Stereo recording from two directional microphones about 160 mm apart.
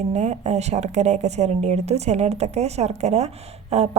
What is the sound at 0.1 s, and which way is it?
Speech, 45° right (ahead or behind).